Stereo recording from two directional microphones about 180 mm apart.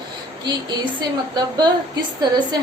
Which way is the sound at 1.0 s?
25° right (ahead or behind).